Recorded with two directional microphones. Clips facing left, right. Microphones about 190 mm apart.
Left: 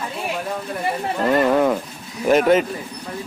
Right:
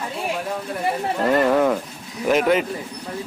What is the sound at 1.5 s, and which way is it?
Bird, 5° left (ahead or behind).